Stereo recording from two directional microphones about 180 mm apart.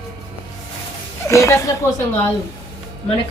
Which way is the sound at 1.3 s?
15° left (ahead or behind).